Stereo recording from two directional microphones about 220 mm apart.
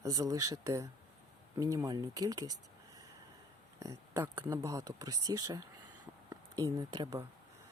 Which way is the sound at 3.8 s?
10° right (ahead or behind).